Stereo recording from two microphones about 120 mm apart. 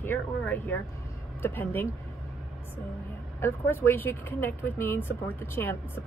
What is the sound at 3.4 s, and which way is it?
A woman's voice, 20° left (ahead or behind).